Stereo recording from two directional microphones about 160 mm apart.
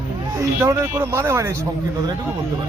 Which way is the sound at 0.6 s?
15° right (ahead or behind).